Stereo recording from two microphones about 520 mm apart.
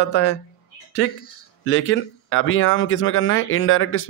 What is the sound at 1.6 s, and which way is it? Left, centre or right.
Speech, left.